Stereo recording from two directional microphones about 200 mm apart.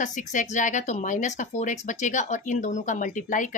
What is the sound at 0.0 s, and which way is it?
Speech, 40° left (ahead or behind).